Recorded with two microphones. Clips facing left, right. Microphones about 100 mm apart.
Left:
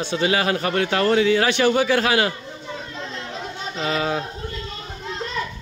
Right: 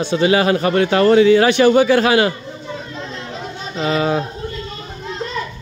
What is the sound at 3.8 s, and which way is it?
Speech, 20° right (ahead or behind).